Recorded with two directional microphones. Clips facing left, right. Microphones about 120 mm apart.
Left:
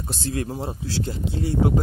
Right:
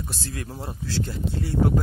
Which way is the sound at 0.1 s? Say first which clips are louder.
Left 7 dB; 25° left (ahead or behind).